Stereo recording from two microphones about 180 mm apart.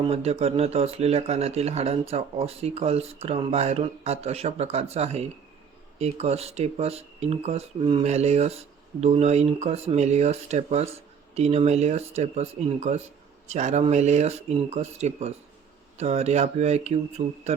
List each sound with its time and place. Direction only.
0.0 s speech: 35° right (ahead or behind)
8.0 s speech: 35° right (ahead or behind)